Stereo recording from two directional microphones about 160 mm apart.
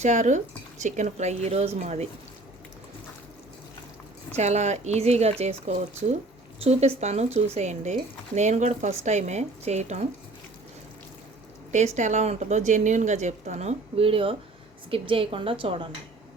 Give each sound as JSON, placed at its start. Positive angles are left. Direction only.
{"t": 0.0, "sound": "a woman's voice", "side_deg": -50}
{"t": 4.3, "sound": "a woman's voice", "side_deg": -45}
{"t": 11.7, "sound": "a woman's voice", "side_deg": -45}